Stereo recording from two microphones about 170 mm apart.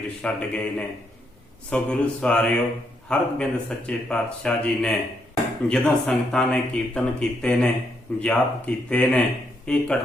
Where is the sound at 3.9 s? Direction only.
5° left (ahead or behind).